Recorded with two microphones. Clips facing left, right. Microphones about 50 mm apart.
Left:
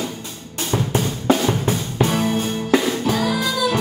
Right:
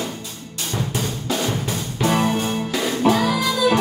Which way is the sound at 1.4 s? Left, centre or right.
Left.